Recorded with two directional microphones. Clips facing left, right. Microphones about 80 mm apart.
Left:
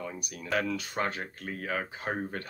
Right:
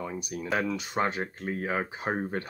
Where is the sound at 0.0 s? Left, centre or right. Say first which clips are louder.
Right 5 dB; right.